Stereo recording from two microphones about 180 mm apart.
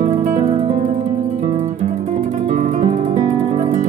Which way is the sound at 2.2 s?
45° right (ahead or behind).